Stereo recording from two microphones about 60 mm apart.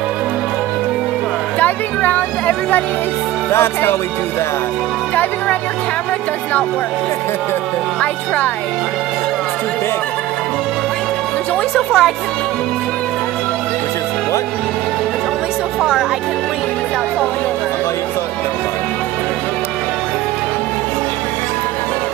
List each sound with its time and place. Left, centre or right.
1.6 s speech: left
3.5 s music: left
11.7 s speech: centre
15.8 s speech: centre